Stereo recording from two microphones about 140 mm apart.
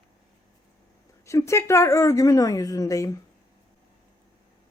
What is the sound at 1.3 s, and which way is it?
A woman's voice, 20° left (ahead or behind).